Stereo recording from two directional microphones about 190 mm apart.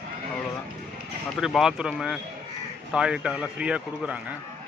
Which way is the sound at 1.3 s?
Centre (ahead or behind).